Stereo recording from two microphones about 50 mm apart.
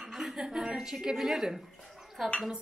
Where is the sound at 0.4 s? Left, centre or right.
Centre.